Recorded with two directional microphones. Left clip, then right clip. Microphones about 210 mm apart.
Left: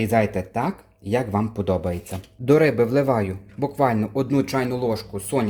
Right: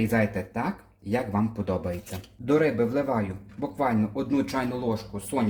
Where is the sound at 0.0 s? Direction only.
40° left (ahead or behind).